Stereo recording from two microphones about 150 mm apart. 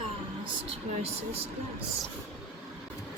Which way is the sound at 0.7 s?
45° right (ahead or behind).